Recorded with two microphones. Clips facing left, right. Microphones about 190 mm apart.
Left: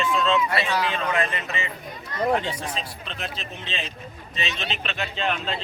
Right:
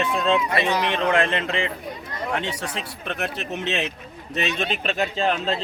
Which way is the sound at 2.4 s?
75° right (ahead or behind).